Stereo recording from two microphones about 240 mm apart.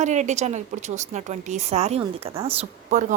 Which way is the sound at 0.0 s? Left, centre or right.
Right.